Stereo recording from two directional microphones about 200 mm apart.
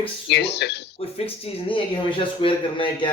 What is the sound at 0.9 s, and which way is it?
A man's voice, 30° left (ahead or behind).